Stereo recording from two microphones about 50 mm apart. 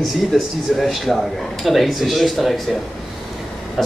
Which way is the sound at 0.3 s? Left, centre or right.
Centre.